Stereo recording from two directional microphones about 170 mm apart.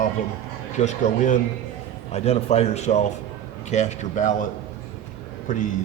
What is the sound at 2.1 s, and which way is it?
A man's voice, 40° left (ahead or behind).